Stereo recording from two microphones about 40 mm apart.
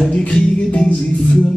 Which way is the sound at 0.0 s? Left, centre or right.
Left.